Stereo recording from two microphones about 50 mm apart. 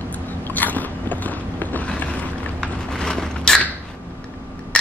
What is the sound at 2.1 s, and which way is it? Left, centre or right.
Vehicle, centre.